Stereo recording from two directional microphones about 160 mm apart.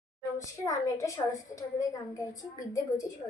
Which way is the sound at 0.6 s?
20° left (ahead or behind).